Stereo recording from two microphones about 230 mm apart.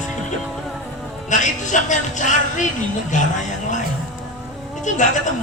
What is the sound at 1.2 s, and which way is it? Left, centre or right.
Music, left.